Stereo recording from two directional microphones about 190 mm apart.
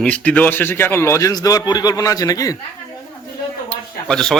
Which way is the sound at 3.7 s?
5° left (ahead or behind).